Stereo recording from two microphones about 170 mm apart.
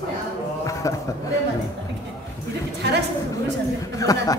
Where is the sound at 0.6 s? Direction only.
20° left (ahead or behind).